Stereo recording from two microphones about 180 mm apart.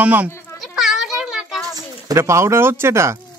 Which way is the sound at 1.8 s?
20° right (ahead or behind).